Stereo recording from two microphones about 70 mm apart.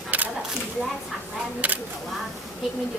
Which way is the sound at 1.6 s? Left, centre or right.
Right.